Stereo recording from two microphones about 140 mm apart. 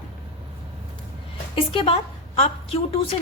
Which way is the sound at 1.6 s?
40° left (ahead or behind).